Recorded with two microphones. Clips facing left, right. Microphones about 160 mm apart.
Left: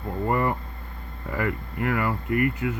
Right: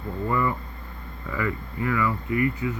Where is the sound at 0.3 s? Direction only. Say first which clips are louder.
Left 1 dB; 60° left (ahead or behind).